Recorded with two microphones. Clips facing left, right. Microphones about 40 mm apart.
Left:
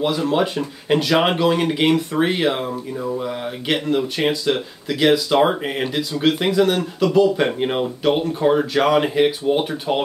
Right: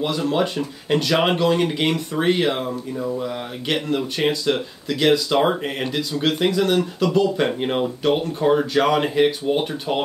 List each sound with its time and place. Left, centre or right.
0.0 s speech: centre